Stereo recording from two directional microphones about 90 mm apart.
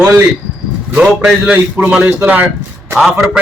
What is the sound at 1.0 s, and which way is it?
Speech, 5° right (ahead or behind).